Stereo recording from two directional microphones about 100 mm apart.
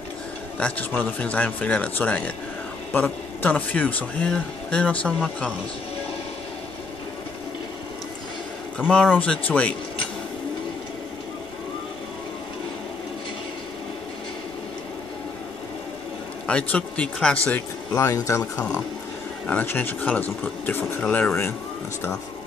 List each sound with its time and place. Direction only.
0.6 s speech: 15° left (ahead or behind)
9.2 s speech: 15° left (ahead or behind)
16.4 s speech: 10° left (ahead or behind)
17.9 s speech: 30° left (ahead or behind)
19.4 s speech: 15° left (ahead or behind)